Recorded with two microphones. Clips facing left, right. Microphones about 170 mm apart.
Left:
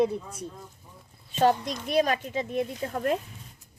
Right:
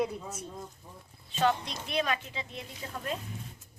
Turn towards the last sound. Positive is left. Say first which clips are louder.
# left 9 dB
turn(degrees=55)  # may be behind; listen again after turning